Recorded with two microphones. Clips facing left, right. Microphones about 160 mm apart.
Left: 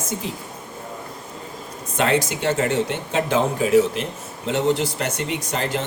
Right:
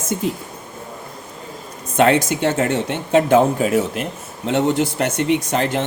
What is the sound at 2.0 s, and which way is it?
Speech, 50° right (ahead or behind).